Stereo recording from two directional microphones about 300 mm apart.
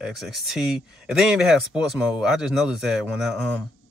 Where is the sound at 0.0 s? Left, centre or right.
Centre.